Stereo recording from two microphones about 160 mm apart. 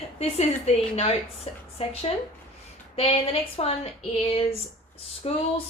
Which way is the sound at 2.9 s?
35° left (ahead or behind).